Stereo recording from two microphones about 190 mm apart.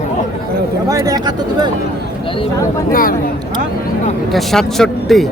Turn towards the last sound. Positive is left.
turn(degrees=0)  # may be behind; listen again after turning